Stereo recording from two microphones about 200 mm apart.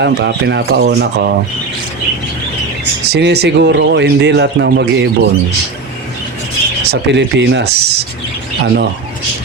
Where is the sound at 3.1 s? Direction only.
55° right (ahead or behind).